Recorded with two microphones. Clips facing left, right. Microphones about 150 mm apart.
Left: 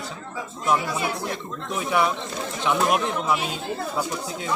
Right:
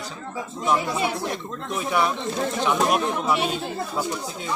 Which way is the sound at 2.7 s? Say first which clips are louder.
Left 2 dB; 5° left (ahead or behind).